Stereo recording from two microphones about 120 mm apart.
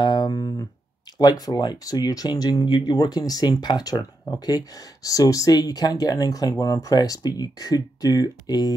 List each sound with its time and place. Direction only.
0.0 s guitar: 35° left (ahead or behind)
1.1 s speech: 35° left (ahead or behind)